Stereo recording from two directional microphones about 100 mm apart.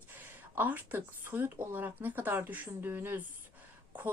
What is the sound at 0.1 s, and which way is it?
A woman's voice, 20° right (ahead or behind).